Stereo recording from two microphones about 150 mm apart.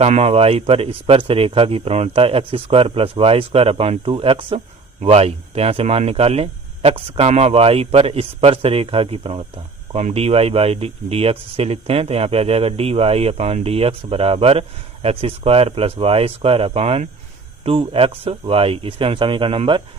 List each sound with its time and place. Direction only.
0.0 s speech: 45° right (ahead or behind)